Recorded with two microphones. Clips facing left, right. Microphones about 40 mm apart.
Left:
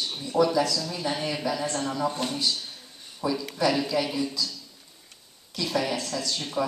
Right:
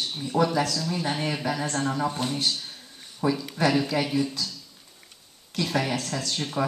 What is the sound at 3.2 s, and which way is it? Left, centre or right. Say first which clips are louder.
Speech: right 1 dB; right.